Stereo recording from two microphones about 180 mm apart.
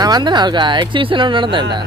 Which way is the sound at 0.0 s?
25° right (ahead or behind).